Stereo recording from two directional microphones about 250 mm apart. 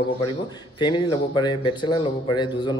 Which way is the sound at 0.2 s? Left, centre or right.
Centre.